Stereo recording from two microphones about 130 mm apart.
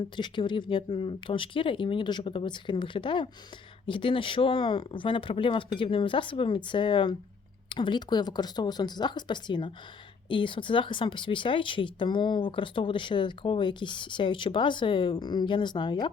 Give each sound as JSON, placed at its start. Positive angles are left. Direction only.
{"t": 0.2, "sound": "speech", "side_deg": 40}